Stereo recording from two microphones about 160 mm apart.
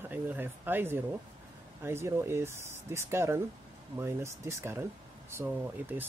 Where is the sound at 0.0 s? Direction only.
10° right (ahead or behind).